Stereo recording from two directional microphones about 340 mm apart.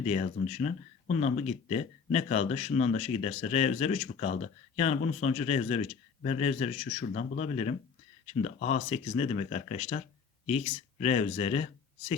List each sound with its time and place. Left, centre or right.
0.0 s speech: centre